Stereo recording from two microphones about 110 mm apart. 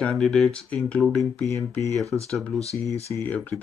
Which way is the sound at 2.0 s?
30° right (ahead or behind).